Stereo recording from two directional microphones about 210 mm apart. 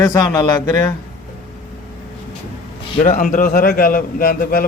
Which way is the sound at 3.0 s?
40° left (ahead or behind).